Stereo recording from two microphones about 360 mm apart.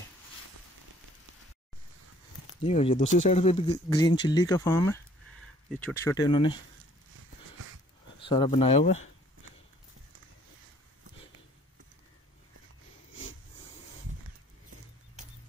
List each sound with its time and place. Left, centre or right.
2.6 s speech: centre
8.3 s speech: centre